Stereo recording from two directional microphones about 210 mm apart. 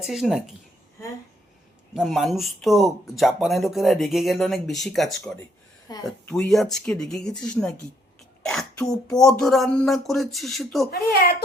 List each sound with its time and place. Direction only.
0.0 s speech: centre (ahead or behind)
1.9 s speech: centre (ahead or behind)
5.9 s speech: 20° left (ahead or behind)
6.2 s speech: centre (ahead or behind)